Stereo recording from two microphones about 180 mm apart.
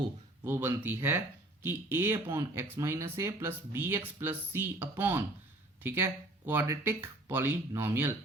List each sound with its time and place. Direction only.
0.4 s speech: 10° right (ahead or behind)